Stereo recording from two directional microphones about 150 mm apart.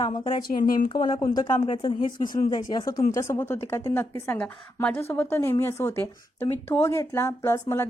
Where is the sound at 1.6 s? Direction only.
35° left (ahead or behind).